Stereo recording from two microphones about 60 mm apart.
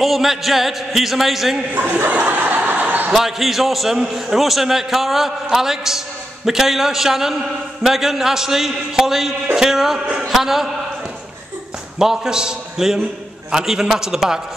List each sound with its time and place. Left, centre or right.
0.0 s a man's voice: centre
1.8 s speech: right
3.1 s a man's voice: centre
12.0 s a man's voice: centre